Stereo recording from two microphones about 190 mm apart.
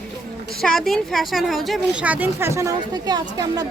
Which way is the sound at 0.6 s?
Centre (ahead or behind).